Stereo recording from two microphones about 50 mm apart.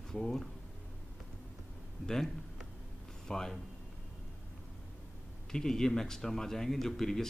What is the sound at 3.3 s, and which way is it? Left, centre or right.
Speech, centre.